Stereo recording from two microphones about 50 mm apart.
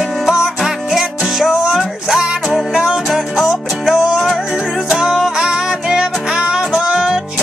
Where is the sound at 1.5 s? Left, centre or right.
Centre.